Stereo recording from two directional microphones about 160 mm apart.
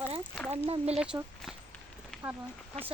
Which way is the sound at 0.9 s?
5° right (ahead or behind).